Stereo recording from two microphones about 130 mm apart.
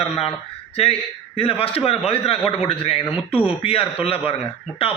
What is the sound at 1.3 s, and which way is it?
A man's voice, 45° left (ahead or behind).